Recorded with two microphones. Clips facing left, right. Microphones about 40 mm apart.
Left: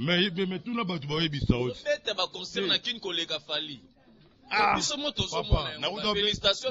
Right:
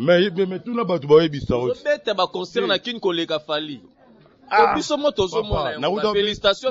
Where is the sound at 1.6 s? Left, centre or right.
Right.